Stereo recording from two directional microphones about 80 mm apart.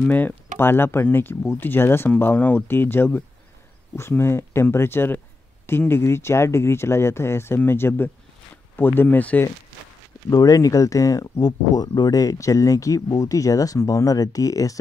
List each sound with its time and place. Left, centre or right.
0.1 s speech: left
10.3 s speech: left